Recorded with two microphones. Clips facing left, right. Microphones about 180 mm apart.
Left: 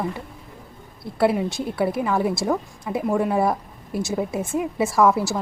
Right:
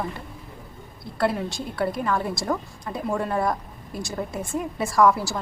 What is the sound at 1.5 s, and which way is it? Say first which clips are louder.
A woman's voice: left 4 dB; 5° left (ahead or behind).